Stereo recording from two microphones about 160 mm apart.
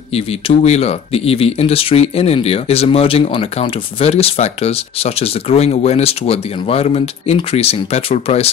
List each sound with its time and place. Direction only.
0.1 s speech: 40° left (ahead or behind)